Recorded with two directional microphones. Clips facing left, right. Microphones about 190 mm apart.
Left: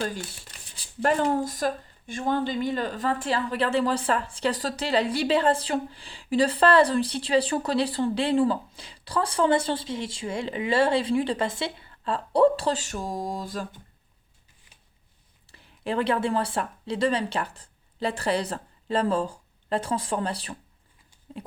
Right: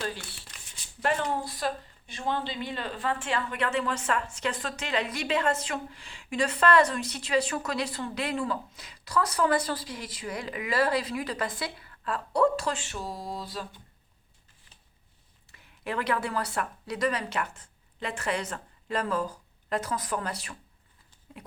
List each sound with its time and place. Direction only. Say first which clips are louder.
0.8 s speech: left 5 dB; 35° left (ahead or behind)
15.4 s speech: left 5 dB; 30° left (ahead or behind)